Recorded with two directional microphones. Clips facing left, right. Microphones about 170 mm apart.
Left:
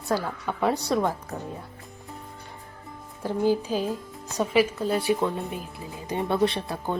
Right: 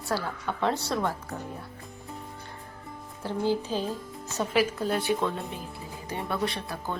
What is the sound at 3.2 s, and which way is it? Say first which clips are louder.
Speech: left 4 dB; 15° left (ahead or behind).